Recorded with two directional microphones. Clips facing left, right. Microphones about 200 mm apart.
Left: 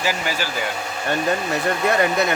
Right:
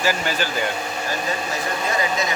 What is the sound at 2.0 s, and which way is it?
Speech, 60° left (ahead or behind).